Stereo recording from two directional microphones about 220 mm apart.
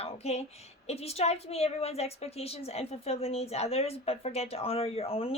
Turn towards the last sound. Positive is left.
turn(degrees=25)  # may be behind; listen again after turning